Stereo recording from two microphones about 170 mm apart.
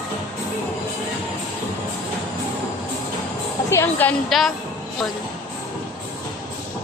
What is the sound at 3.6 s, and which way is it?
Speech, 15° left (ahead or behind).